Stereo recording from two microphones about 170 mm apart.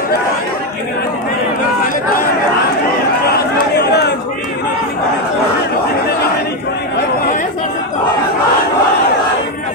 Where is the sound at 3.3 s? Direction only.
75° left (ahead or behind).